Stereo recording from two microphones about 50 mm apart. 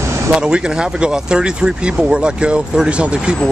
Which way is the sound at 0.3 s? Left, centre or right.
Centre.